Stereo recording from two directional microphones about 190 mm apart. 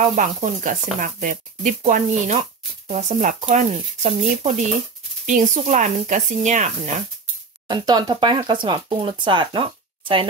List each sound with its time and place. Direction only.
0.0 s speech: 40° right (ahead or behind)
7.6 s speech: 20° right (ahead or behind)